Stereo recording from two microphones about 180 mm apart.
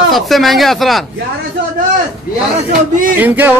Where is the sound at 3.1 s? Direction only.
10° right (ahead or behind).